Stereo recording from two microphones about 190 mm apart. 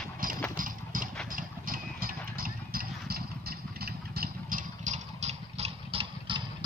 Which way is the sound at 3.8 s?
55° right (ahead or behind).